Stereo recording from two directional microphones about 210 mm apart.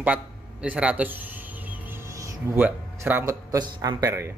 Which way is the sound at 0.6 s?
5° right (ahead or behind).